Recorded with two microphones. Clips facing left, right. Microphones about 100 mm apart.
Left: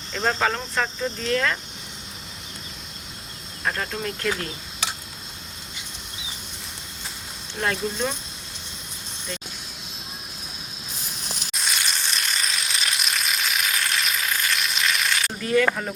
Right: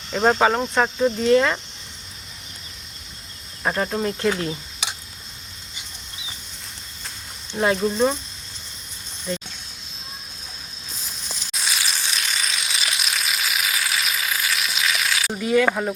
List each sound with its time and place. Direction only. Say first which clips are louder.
0.1 s speech: right 6 dB; 35° right (ahead or behind)
1.3 s speech: right 6 dB; 25° right (ahead or behind)
3.6 s speech: right 5 dB; 20° right (ahead or behind)
7.6 s speech: right 6 dB; 15° right (ahead or behind)
11.5 s sizzle: right 1 dB; centre (ahead or behind)
15.4 s speech: right 3 dB; 10° right (ahead or behind)